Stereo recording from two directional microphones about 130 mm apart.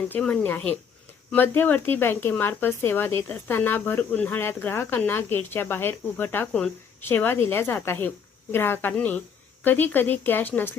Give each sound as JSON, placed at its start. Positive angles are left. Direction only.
{"t": 0.1, "sound": "speech", "side_deg": 10}